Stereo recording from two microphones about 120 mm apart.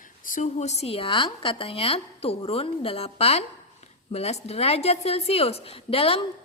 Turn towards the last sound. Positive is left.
turn(degrees=50)  # may be behind; listen again after turning